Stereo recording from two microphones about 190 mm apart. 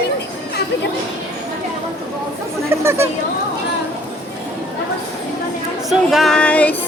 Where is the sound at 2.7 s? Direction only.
15° right (ahead or behind).